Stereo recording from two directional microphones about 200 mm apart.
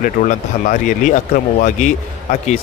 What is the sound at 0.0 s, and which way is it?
Speech, 40° left (ahead or behind).